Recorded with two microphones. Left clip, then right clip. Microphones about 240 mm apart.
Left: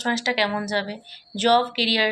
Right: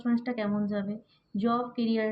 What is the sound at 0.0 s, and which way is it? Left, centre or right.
Speech, centre.